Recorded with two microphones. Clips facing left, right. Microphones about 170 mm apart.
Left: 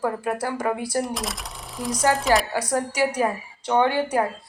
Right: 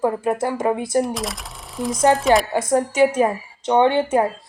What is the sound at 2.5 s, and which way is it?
A woman's voice, 25° right (ahead or behind).